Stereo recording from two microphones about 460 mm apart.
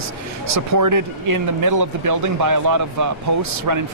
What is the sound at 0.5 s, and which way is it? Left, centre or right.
Speech, right.